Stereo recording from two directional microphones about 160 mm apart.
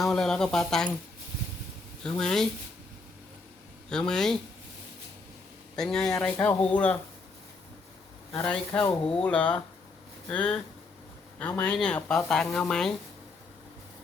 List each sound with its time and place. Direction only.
0.0 s speech: centre (ahead or behind)
2.0 s speech: 5° left (ahead or behind)
3.8 s speech: 5° left (ahead or behind)
5.7 s speech: 5° left (ahead or behind)
6.3 s speech: 15° left (ahead or behind)
8.4 s speech: 5° left (ahead or behind)